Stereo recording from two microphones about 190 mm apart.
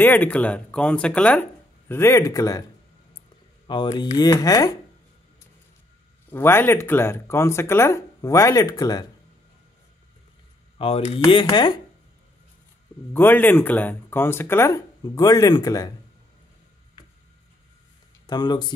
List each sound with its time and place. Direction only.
0.0 s speech: 10° left (ahead or behind)
3.6 s speech: 25° left (ahead or behind)
6.3 s speech: 10° left (ahead or behind)
10.8 s speech: 30° left (ahead or behind)
13.1 s speech: 10° left (ahead or behind)
18.2 s speech: 20° left (ahead or behind)